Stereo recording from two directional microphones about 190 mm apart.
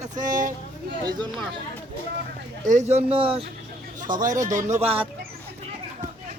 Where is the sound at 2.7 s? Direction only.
35° right (ahead or behind).